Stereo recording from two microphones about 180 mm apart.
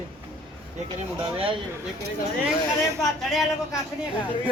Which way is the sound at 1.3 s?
30° right (ahead or behind).